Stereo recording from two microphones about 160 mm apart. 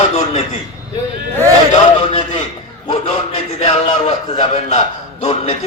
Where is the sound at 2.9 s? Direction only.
35° left (ahead or behind).